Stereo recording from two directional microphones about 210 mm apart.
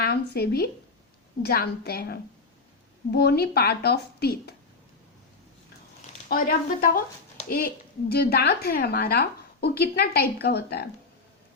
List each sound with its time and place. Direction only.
0.0 s a woman's voice: 50° left (ahead or behind)
6.2 s a woman's voice: 45° left (ahead or behind)